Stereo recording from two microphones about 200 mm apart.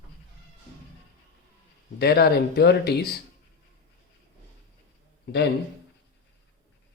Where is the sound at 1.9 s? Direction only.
50° left (ahead or behind).